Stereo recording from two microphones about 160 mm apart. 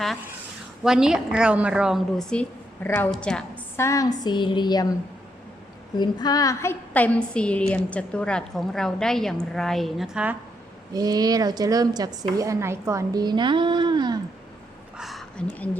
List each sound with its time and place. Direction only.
0.9 s a woman's voice: 5° right (ahead or behind)
3.8 s speech: 20° left (ahead or behind)
6.0 s a woman's voice: 25° left (ahead or behind); by 10.3 s 5° right (ahead or behind)
10.9 s a woman's voice: 25° right (ahead or behind)
14.9 s a sound: centre (ahead or behind)
15.5 s a woman's voice: 10° left (ahead or behind)